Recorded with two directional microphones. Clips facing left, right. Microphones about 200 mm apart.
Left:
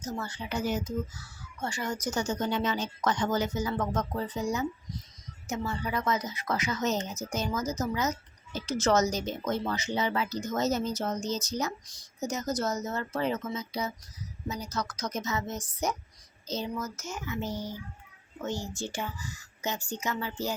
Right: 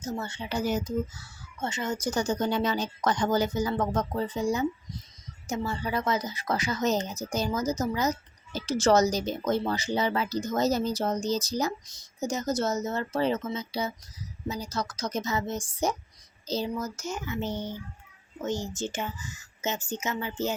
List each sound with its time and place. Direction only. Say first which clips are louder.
0.0 s speech: right 2 dB; 25° right (ahead or behind)
1.1 s speech: even; 25° right (ahead or behind)
2.0 s speech: right 3 dB; 35° right (ahead or behind); by 20.5 s 20° right (ahead or behind)